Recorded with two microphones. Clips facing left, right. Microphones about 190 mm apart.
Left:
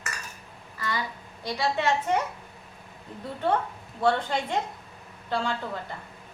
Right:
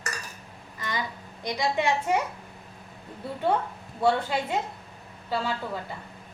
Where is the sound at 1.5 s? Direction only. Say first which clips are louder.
Even; 15° right (ahead or behind).